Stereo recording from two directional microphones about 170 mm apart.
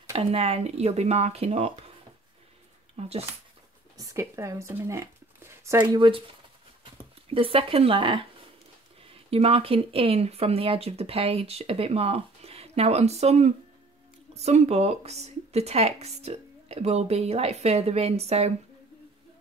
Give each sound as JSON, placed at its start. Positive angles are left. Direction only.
{"t": 0.1, "sound": "speech", "side_deg": -35}
{"t": 3.0, "sound": "speech", "side_deg": -35}
{"t": 3.9, "sound": "speech", "side_deg": -20}
{"t": 5.9, "sound": "speech", "side_deg": -30}